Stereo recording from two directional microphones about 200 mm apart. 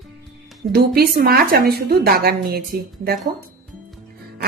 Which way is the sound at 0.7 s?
50° right (ahead or behind).